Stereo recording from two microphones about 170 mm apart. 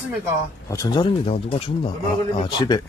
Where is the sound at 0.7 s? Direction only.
20° left (ahead or behind).